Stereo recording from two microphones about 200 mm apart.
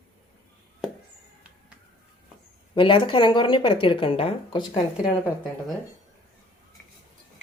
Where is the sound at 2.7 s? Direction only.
25° left (ahead or behind).